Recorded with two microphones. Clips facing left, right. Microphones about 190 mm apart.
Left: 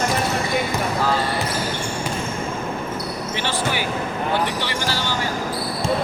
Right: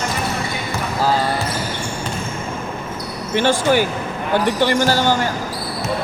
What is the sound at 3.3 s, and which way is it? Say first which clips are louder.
Speech: right 10 dB; 45° right (ahead or behind).